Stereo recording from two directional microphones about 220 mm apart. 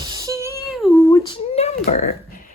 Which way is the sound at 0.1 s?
15° right (ahead or behind).